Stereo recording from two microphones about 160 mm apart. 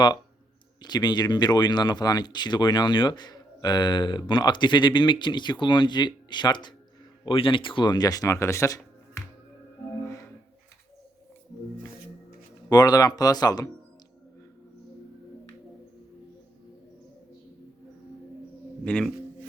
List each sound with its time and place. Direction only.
0.8 s speech: 25° left (ahead or behind)
10.0 s music: 20° left (ahead or behind)
12.7 s speech: 25° left (ahead or behind)
18.9 s speech: 5° left (ahead or behind)